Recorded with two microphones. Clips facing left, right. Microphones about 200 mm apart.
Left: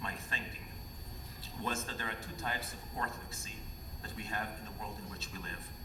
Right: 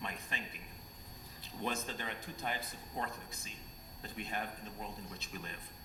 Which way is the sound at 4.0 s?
20° right (ahead or behind).